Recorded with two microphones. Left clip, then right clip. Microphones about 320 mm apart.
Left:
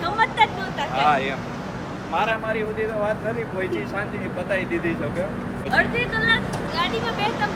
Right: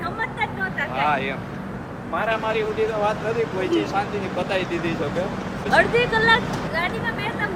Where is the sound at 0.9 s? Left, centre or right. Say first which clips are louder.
Left 3 dB; centre.